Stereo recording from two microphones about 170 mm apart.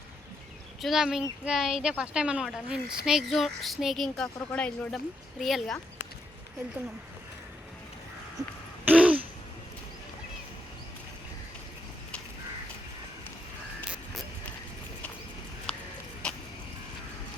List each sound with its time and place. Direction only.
0.8 s speech: centre (ahead or behind)
8.4 s music: 20° right (ahead or behind)
8.9 s a sound: 5° right (ahead or behind)
15.7 s horse: 5° left (ahead or behind)